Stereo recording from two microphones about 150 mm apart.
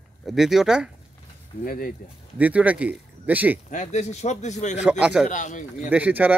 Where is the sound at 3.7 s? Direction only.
55° left (ahead or behind).